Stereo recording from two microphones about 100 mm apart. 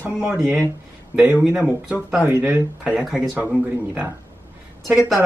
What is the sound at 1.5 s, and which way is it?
Speech, 10° right (ahead or behind).